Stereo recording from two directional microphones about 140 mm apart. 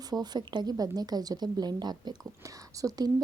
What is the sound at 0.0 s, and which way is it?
A woman's voice, 30° right (ahead or behind).